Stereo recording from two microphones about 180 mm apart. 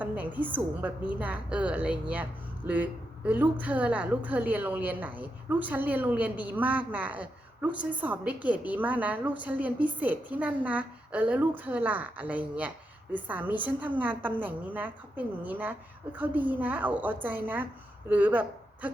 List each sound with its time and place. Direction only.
0.0 s a woman's voice: 10° right (ahead or behind)